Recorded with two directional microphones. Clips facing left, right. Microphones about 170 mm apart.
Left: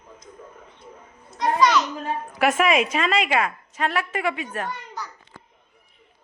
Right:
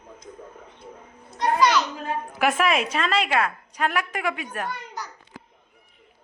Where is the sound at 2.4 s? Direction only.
Centre (ahead or behind).